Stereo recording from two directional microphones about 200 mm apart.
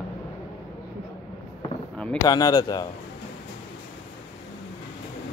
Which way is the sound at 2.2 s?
20° left (ahead or behind).